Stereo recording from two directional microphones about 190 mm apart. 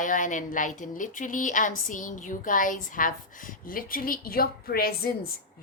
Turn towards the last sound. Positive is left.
turn(degrees=50)  # may be behind; listen again after turning